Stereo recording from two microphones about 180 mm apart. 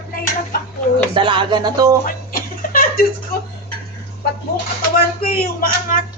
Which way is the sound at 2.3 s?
55° left (ahead or behind).